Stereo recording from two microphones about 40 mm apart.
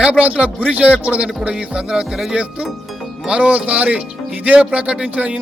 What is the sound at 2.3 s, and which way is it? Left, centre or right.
Speech, right.